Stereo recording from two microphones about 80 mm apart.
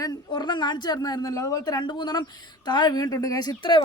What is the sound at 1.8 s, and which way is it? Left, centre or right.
Speech, left.